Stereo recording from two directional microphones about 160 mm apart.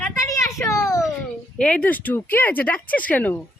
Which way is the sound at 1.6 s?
10° left (ahead or behind).